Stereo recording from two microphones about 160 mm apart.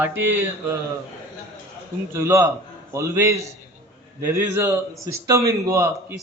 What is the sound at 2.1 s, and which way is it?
A man's voice, 15° right (ahead or behind).